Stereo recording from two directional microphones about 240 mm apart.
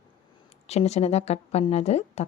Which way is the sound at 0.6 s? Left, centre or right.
Left.